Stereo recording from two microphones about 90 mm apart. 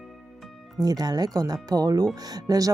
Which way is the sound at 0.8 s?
50° right (ahead or behind).